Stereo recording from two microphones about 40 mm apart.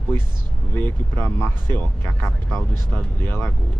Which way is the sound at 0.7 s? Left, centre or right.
Left.